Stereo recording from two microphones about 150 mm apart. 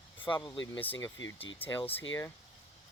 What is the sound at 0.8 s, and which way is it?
Speech, 15° left (ahead or behind).